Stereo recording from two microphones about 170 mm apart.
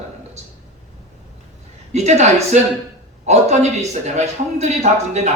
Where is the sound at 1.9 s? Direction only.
40° right (ahead or behind).